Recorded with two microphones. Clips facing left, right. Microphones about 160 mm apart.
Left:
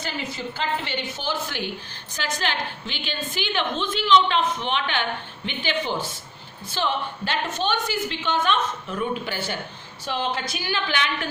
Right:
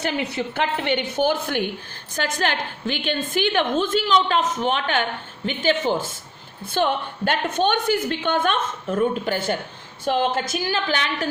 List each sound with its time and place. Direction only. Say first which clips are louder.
0.0 s a woman's voice: right 6 dB; 65° right (ahead or behind); by 11.3 s 40° right (ahead or behind)